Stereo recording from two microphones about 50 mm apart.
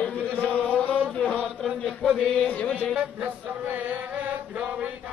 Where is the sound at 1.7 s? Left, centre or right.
Centre.